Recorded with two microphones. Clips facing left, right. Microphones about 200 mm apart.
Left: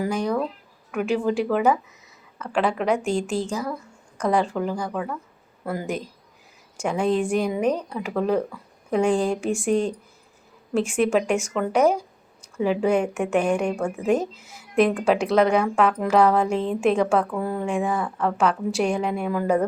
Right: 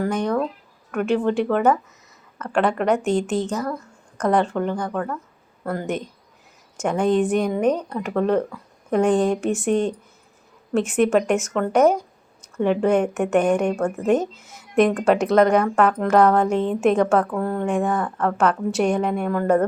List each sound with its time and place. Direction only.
0.0 s a woman's voice: 5° left (ahead or behind)
3.5 s a sound: 10° left (ahead or behind)
4.4 s a woman's voice: centre (ahead or behind)
6.8 s a woman's voice: centre (ahead or behind)
10.8 s a woman's voice: centre (ahead or behind)
13.8 s speech: 10° left (ahead or behind)
14.1 s a woman's voice: centre (ahead or behind)